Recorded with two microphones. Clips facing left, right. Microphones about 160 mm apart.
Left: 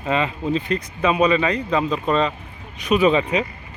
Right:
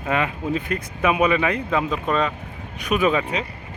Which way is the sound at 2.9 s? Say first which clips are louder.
Left 4 dB; centre (ahead or behind).